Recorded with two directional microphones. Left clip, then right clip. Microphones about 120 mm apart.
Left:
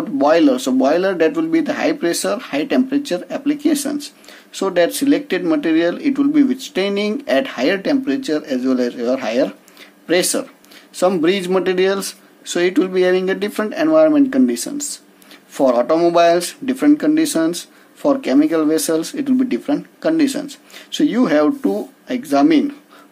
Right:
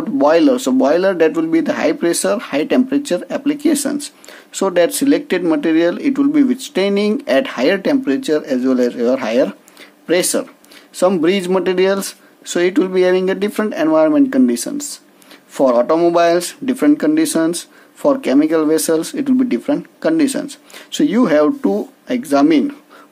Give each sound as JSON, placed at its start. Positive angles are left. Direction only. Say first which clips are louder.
{"t": 0.2, "sound": "speech", "louder": "right 1 dB", "side_deg": -35}